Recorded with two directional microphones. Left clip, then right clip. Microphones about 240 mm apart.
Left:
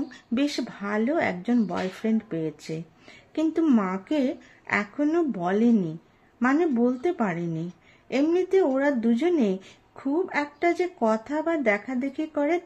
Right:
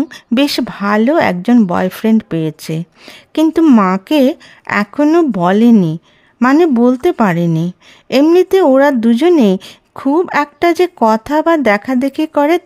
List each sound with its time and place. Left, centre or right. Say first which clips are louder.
0.1 s speech: right 13 dB; right